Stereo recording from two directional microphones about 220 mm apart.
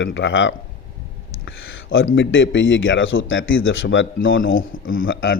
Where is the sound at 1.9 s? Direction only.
65° left (ahead or behind).